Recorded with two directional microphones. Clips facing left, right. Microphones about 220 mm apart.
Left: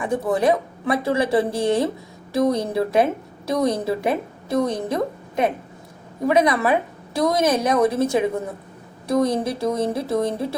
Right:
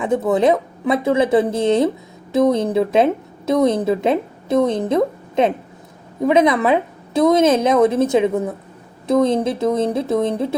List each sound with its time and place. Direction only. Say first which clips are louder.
0.0 s a woman's voice: right 4 dB; 20° right (ahead or behind)
6.2 s a woman's voice: right 4 dB; 20° right (ahead or behind)